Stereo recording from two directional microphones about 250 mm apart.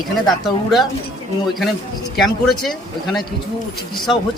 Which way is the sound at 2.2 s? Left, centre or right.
Centre.